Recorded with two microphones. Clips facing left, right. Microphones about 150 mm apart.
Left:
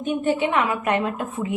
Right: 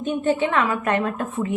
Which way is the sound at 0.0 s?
15° left (ahead or behind).